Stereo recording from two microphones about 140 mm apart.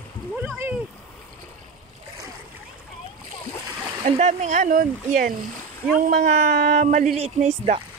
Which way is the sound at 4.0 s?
55° right (ahead or behind).